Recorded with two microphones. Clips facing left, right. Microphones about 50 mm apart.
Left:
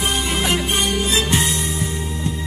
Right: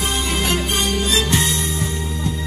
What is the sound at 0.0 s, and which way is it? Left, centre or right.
Music, left.